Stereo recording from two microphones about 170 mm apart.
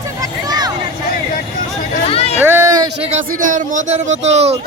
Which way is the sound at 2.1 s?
35° left (ahead or behind).